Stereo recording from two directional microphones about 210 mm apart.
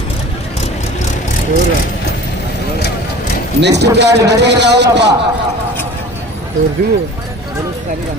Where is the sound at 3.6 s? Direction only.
55° right (ahead or behind).